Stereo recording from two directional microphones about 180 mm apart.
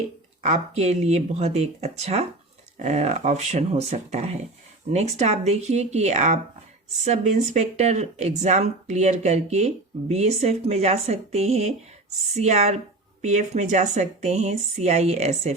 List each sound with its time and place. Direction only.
0.4 s speech: 40° right (ahead or behind)